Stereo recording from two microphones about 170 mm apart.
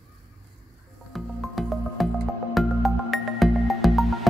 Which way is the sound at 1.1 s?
Centre (ahead or behind).